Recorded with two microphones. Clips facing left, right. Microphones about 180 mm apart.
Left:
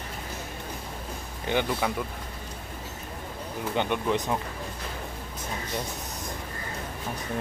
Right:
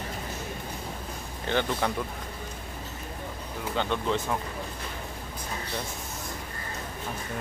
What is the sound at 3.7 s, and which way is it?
Speech, 15° left (ahead or behind).